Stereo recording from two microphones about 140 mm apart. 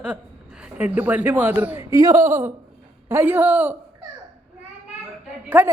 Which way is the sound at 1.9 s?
25° right (ahead or behind).